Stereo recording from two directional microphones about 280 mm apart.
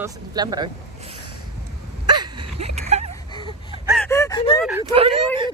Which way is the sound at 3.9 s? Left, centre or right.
Centre.